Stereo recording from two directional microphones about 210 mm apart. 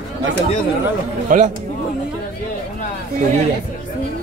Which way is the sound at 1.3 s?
40° right (ahead or behind).